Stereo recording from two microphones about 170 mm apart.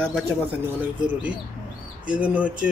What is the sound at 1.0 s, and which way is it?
Speech, 10° right (ahead or behind).